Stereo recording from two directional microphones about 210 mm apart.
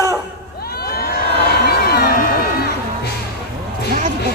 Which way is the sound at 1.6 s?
50° left (ahead or behind).